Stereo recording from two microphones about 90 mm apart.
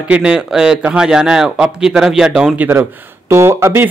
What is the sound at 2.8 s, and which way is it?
Speech, 30° right (ahead or behind).